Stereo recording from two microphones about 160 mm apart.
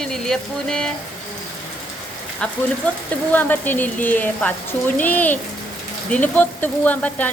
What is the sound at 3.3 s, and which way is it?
Speech, 10° left (ahead or behind).